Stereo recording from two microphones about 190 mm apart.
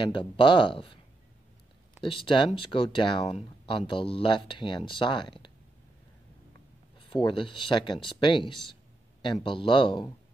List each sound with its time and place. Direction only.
0.0 s speech: 25° left (ahead or behind)
2.0 s speech: 25° left (ahead or behind)
7.0 s speech: 25° left (ahead or behind)